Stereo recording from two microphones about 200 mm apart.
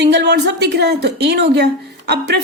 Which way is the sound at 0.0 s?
55° right (ahead or behind).